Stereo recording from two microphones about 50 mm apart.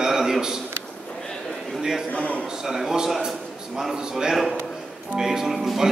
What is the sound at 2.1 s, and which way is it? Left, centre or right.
Speech, left.